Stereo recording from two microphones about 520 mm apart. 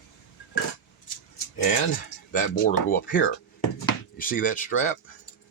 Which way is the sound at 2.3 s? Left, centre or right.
Centre.